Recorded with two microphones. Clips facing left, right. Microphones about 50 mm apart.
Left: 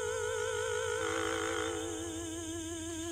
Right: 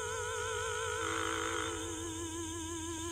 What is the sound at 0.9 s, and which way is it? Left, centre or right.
Music, centre.